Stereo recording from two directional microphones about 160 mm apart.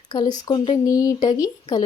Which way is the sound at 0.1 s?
25° left (ahead or behind).